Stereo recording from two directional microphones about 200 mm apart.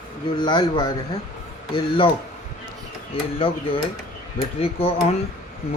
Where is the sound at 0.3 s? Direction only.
20° left (ahead or behind).